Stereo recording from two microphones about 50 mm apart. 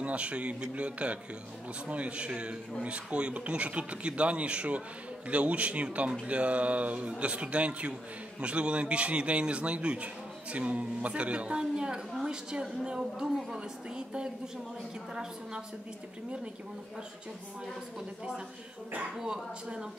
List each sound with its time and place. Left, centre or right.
0.0 s a man's voice: right
19.1 s speech: centre